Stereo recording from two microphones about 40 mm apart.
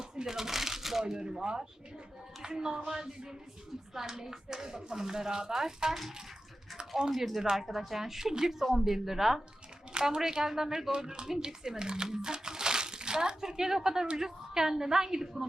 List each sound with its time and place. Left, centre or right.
0.3 s speech: centre
5.9 s a woman's voice: centre
9.9 s speech: centre
10.9 s speech: right